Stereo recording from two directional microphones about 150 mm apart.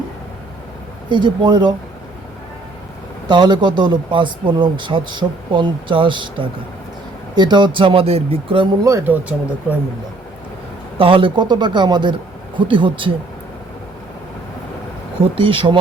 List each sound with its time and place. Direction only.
1.1 s speech: 30° right (ahead or behind)
3.2 s speech: 30° right (ahead or behind)
8.8 s speech: 20° right (ahead or behind)
10.9 s speech: 35° right (ahead or behind)
15.4 s speech: 35° right (ahead or behind)